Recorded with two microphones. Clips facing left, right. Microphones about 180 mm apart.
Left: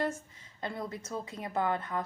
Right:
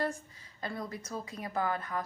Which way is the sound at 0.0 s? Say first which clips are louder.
Left 1 dB; 20° left (ahead or behind).